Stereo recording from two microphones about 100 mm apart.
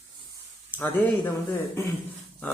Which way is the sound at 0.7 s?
20° left (ahead or behind).